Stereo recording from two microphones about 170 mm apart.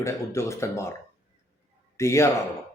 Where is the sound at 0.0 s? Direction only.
15° left (ahead or behind).